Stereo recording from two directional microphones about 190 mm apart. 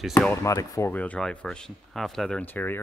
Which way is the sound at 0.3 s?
15° left (ahead or behind).